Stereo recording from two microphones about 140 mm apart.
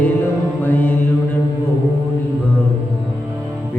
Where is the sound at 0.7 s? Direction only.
10° left (ahead or behind).